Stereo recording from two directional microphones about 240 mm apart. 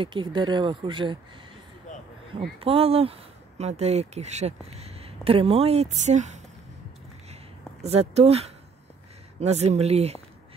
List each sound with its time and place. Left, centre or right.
0.0 s speech: centre
1.9 s a sound: left
2.6 s speech: right
7.8 s speech: right